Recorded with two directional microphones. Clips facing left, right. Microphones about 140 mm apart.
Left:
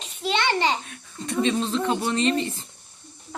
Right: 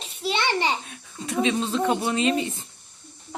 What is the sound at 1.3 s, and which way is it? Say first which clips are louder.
Speech: even; centre (ahead or behind).